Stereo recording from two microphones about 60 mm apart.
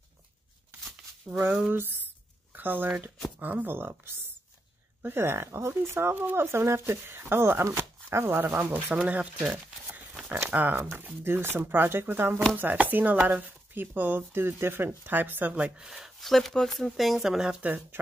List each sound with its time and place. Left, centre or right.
1.7 s speech: right
8.5 s speech: right
10.2 s speech: right
10.8 s speech: right
15.5 s speech: right
15.8 s speech: centre
17.6 s speech: right